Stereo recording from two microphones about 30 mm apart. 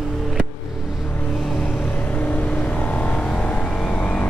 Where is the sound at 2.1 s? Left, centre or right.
Left.